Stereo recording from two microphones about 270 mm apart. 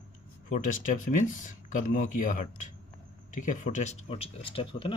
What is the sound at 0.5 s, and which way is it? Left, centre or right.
Speech, left.